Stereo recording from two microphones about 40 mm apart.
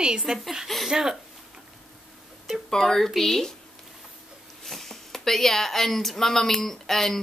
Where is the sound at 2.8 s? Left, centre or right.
Centre.